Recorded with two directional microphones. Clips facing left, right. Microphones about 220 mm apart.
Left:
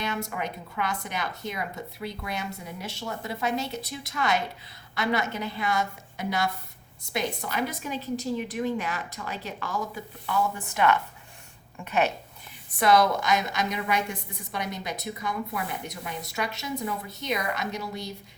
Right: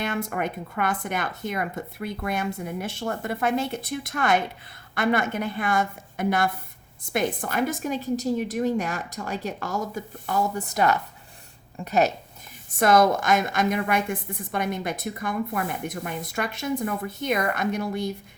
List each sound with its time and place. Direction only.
0.0 s a woman's voice: 50° right (ahead or behind)